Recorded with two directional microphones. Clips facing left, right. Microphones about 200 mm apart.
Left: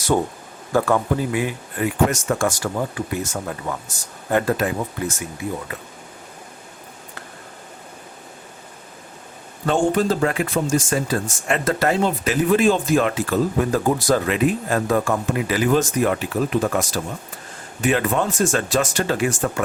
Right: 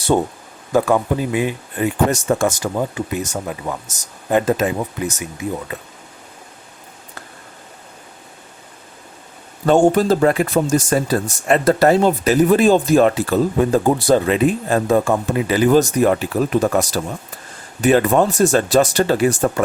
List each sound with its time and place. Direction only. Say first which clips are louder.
0.1 s speech: right 3 dB; 20° right (ahead or behind)
9.6 s speech: right 6 dB; 40° right (ahead or behind)